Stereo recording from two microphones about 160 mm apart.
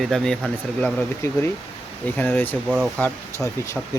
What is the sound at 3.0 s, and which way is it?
Speech, 20° left (ahead or behind).